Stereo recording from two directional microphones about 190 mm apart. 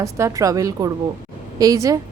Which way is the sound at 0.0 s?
15° right (ahead or behind).